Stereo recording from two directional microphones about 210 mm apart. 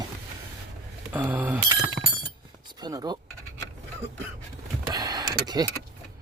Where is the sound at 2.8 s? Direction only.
20° right (ahead or behind).